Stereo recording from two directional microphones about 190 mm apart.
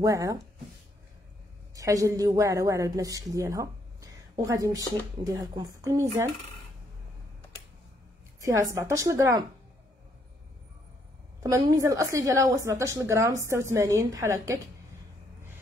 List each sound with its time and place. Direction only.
0.0 s a woman's voice: 20° right (ahead or behind)
1.8 s a woman's voice: 15° right (ahead or behind)
8.4 s a woman's voice: 15° right (ahead or behind)
11.4 s a woman's voice: 15° right (ahead or behind)